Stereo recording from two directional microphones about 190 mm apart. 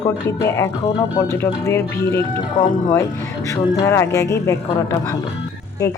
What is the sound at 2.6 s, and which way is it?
Speech, 25° left (ahead or behind).